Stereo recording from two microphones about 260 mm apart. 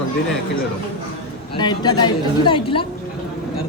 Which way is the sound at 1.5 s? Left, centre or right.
Centre.